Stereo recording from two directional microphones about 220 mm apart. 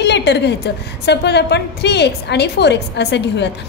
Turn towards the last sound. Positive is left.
turn(degrees=50)  # may be behind; listen again after turning